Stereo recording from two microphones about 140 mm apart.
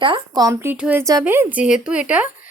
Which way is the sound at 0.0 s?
35° right (ahead or behind).